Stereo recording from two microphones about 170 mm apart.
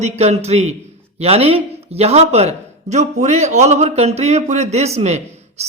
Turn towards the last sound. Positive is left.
turn(degrees=-40)  # may be behind; listen again after turning